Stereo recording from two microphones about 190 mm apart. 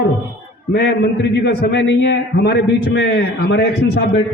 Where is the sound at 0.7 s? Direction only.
60° left (ahead or behind).